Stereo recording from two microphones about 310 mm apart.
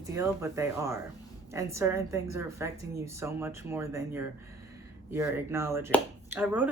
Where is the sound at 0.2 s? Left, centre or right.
Centre.